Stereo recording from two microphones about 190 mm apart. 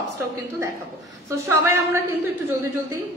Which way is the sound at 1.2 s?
15° right (ahead or behind).